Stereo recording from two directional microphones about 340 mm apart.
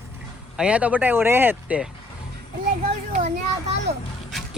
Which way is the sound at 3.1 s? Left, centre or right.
Centre.